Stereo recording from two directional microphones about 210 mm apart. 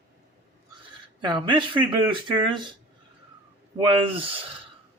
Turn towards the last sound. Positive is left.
turn(degrees=-25)  # may be behind; listen again after turning